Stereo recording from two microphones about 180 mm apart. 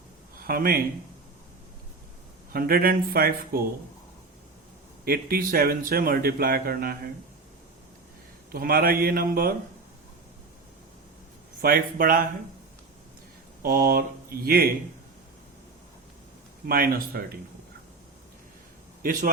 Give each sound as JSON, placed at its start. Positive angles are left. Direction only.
{"t": 0.4, "sound": "speech", "side_deg": -55}
{"t": 2.5, "sound": "speech", "side_deg": -55}
{"t": 5.0, "sound": "speech", "side_deg": -55}
{"t": 8.5, "sound": "speech", "side_deg": -55}
{"t": 11.6, "sound": "speech", "side_deg": -55}
{"t": 13.6, "sound": "speech", "side_deg": -55}
{"t": 16.6, "sound": "speech", "side_deg": -55}